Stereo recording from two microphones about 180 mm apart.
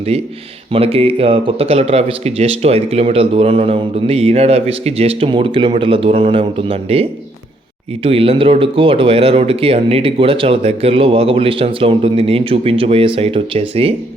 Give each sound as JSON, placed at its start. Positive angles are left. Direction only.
{"t": 0.7, "sound": "speech", "side_deg": -30}